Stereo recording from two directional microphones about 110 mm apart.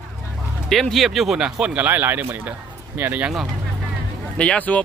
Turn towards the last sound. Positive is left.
turn(degrees=15)  # may be behind; listen again after turning